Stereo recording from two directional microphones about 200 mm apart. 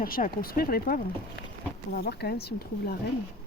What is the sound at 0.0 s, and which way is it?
Speech, 45° left (ahead or behind).